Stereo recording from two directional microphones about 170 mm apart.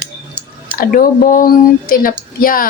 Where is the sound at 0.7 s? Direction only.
55° left (ahead or behind).